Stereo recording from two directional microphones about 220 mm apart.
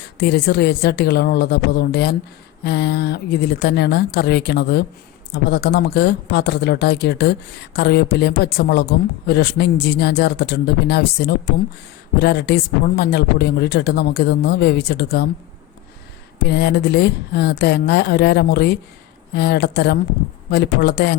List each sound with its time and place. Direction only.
0.0 s speech: 50° left (ahead or behind)
16.4 s speech: 50° left (ahead or behind)